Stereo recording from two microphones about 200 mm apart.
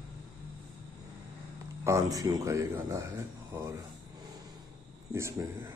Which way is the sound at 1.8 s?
15° right (ahead or behind).